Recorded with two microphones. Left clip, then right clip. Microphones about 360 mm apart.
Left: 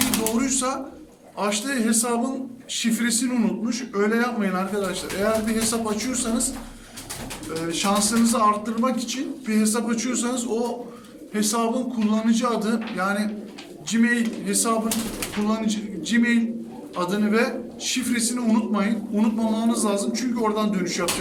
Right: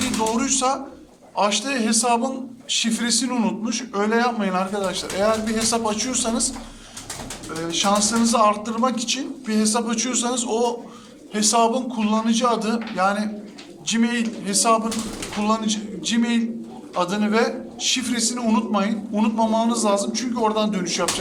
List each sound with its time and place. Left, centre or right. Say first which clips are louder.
0.3 s a man's voice: right 3 dB; centre
7.7 s a man's voice: right 3 dB; centre